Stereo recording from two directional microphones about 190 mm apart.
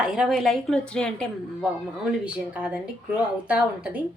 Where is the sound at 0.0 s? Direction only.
Centre (ahead or behind).